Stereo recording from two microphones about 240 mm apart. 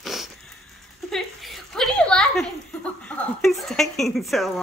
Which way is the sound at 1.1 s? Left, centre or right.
Centre.